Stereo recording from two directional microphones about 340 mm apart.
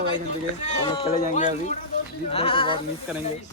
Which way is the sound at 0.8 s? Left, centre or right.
Centre.